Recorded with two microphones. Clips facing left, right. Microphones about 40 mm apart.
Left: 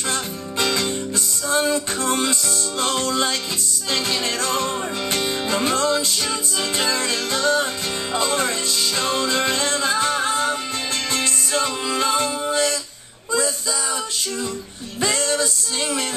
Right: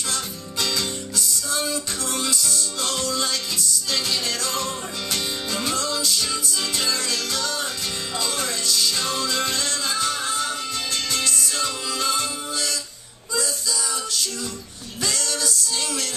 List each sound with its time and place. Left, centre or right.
0.1 s music: left
5.1 s music: left
15.0 s music: left